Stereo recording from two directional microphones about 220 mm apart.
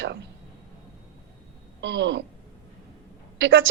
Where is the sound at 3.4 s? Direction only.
60° right (ahead or behind).